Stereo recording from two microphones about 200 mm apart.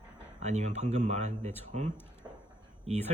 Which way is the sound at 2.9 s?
30° right (ahead or behind).